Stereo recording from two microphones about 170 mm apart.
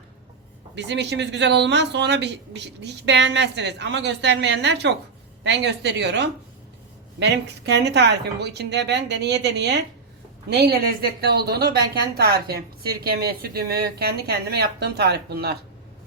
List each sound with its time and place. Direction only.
0.8 s a woman's voice: 90° right
10.5 s speech: 70° right (ahead or behind)